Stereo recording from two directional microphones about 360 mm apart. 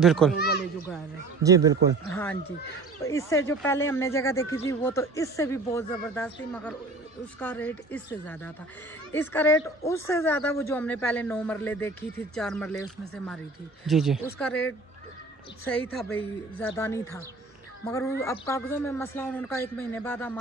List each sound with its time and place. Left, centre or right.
0.0 s a woman's voice: centre
0.4 s a sound: left
1.4 s speech: centre
2.0 s a sound: centre
3.0 s a woman's voice: centre
15.7 s a woman's voice: centre